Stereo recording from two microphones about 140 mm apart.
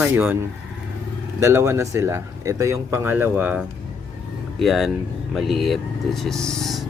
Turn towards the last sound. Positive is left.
turn(degrees=0)  # may be behind; listen again after turning